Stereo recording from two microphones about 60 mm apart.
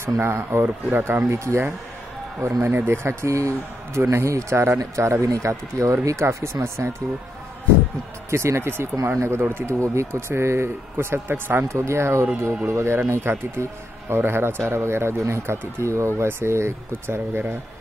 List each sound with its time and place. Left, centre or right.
0.0 s speech: right
1.4 s a man's voice: right
8.3 s a man's voice: right